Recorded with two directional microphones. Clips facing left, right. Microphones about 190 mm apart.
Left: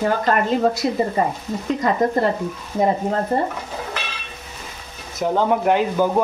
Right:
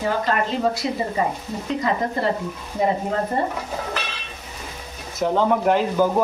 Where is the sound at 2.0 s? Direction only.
45° left (ahead or behind).